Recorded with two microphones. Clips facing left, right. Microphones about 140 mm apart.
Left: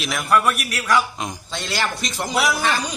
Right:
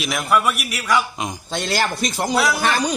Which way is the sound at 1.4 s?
50° right (ahead or behind).